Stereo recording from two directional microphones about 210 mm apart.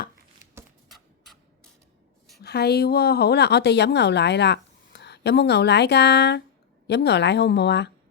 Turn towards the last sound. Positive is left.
turn(degrees=55)  # may be behind; listen again after turning